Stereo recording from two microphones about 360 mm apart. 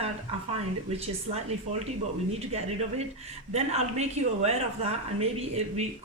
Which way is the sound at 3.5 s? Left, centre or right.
Centre.